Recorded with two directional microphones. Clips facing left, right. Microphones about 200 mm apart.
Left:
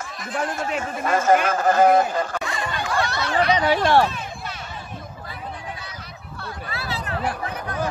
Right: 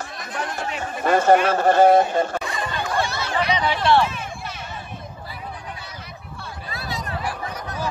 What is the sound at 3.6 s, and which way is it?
Speech, 40° left (ahead or behind).